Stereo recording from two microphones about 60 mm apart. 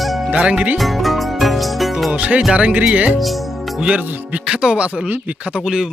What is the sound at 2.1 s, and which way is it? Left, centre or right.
Speech, right.